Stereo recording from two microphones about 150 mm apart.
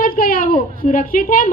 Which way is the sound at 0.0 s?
70° left (ahead or behind).